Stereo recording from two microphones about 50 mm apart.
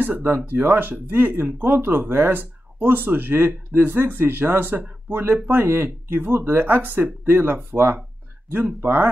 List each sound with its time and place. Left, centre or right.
0.0 s speech: right